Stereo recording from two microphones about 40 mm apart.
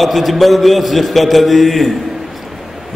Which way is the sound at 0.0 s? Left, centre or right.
Centre.